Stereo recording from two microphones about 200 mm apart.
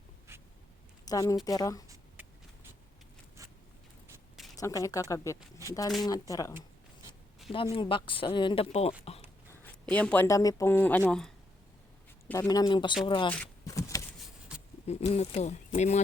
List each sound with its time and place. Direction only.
1.0 s speech: 20° left (ahead or behind)
4.5 s speech: 15° left (ahead or behind)
7.5 s speech: 25° left (ahead or behind)
9.5 s speech: 10° left (ahead or behind)
12.3 s speech: 20° left (ahead or behind)
13.3 s a sound: 10° left (ahead or behind)
14.8 s speech: 30° left (ahead or behind)